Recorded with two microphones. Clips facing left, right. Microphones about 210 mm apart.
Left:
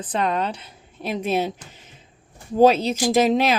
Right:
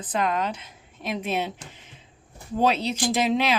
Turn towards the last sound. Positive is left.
turn(degrees=45)  # may be behind; listen again after turning